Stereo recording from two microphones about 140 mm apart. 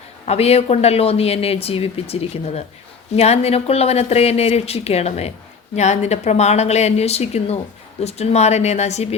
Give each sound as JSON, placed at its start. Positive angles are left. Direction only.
{"t": 0.3, "sound": "speech", "side_deg": 45}